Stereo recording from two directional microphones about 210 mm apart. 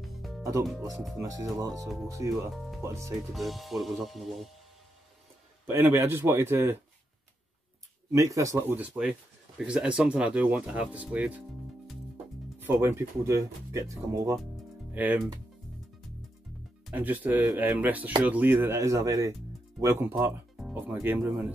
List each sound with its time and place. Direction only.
0.0 s music: centre (ahead or behind)
0.4 s music: 15° right (ahead or behind)
1.1 s speech: 15° right (ahead or behind)
1.7 s speech: centre (ahead or behind)
2.8 s speech: 15° right (ahead or behind)
3.3 s speech: centre (ahead or behind)
5.7 s speech: 10° right (ahead or behind)
8.1 s speech: 15° right (ahead or behind)
12.5 s speech: 10° right (ahead or behind)
16.9 s speech: 10° right (ahead or behind)